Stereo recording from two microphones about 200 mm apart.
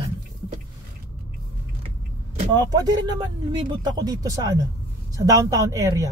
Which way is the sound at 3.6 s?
20° right (ahead or behind).